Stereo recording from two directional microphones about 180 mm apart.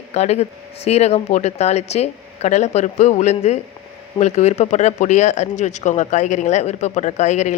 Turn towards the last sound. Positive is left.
turn(degrees=40)  # may be behind; listen again after turning